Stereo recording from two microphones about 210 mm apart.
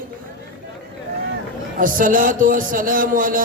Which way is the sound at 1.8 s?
40° right (ahead or behind).